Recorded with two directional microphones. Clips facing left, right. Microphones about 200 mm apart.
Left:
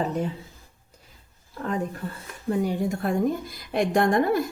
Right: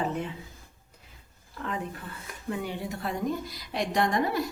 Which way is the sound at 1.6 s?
40° left (ahead or behind).